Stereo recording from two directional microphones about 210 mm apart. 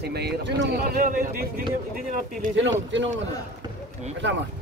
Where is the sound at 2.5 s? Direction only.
60° right (ahead or behind).